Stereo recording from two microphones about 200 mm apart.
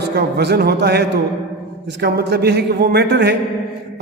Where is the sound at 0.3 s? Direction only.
55° right (ahead or behind).